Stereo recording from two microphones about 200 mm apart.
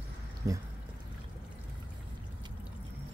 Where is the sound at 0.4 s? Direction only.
15° right (ahead or behind).